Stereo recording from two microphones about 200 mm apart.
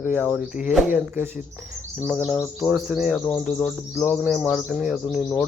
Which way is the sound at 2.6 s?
Centre (ahead or behind).